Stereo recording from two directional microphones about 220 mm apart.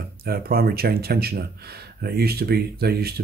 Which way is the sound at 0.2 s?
45° right (ahead or behind).